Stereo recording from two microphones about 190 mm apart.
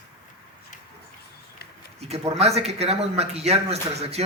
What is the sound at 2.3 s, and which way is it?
A man's voice, 35° right (ahead or behind).